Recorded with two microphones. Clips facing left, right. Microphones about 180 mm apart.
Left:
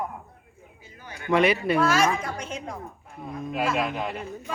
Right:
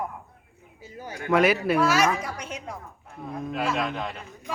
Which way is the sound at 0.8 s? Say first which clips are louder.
Right 7 dB; 40° right (ahead or behind).